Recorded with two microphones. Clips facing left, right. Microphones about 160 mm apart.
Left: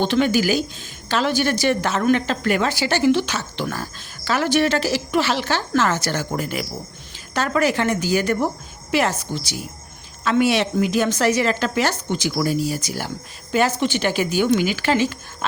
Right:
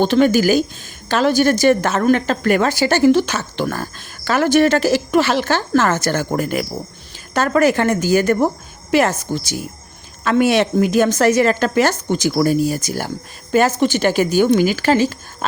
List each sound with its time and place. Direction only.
0.0 s a woman's voice: 45° right (ahead or behind)